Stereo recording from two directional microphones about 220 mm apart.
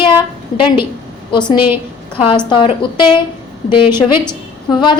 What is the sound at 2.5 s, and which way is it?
A woman's voice, 20° left (ahead or behind).